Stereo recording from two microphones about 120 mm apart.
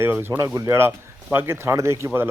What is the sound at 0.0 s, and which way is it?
Speech, 20° right (ahead or behind).